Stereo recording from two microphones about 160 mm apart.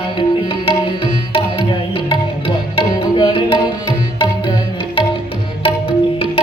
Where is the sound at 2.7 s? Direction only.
35° left (ahead or behind).